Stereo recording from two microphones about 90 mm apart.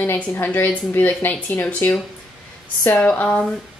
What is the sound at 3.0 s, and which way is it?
Speech, 20° left (ahead or behind).